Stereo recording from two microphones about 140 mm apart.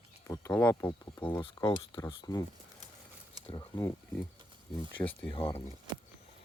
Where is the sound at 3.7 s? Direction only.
25° left (ahead or behind).